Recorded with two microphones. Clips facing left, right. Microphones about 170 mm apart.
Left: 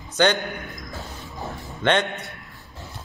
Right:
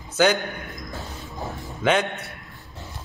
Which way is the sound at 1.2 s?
Centre (ahead or behind).